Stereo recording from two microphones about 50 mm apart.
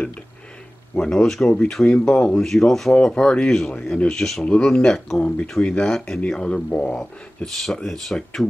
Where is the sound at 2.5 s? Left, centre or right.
Centre.